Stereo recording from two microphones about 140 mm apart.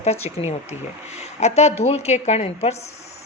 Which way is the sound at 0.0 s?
50° left (ahead or behind).